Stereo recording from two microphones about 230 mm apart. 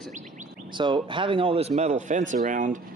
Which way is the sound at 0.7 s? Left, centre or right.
Centre.